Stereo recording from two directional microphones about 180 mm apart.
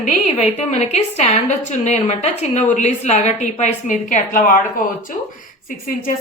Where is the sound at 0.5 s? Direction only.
40° left (ahead or behind).